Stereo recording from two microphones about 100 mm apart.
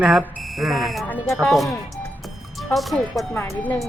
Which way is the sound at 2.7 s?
Centre (ahead or behind).